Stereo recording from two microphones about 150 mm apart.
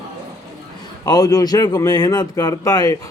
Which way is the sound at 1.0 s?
25° left (ahead or behind).